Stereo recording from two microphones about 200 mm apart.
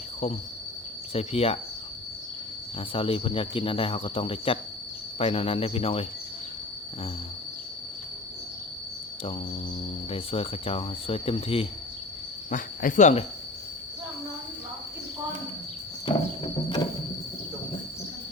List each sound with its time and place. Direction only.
1.1 s speech: 30° left (ahead or behind)
2.9 s speech: 25° left (ahead or behind)
10.1 s speech: 30° left (ahead or behind)
12.5 s cricket: 40° left (ahead or behind)
16.0 s ratchet: 25° left (ahead or behind)